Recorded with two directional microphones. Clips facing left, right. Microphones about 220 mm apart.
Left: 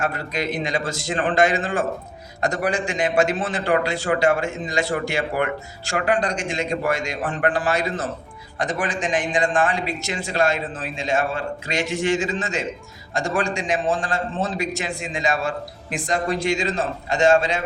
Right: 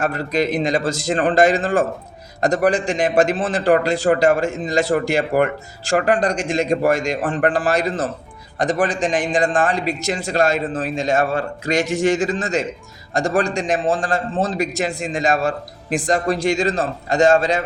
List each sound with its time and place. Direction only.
0.0 s a man's voice: 40° right (ahead or behind)
3.3 s a man's voice: 35° right (ahead or behind)